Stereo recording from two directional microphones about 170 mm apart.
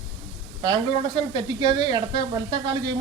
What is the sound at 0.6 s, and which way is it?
Speech, 25° right (ahead or behind).